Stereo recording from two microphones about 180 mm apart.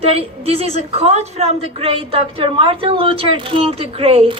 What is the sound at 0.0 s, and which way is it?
A woman's voice, 35° right (ahead or behind).